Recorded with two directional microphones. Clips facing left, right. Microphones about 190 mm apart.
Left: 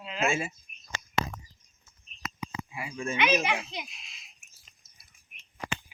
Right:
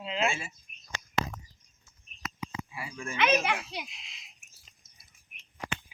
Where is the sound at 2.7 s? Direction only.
20° left (ahead or behind).